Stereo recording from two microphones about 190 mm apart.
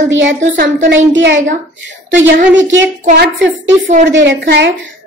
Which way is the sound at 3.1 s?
65° right (ahead or behind).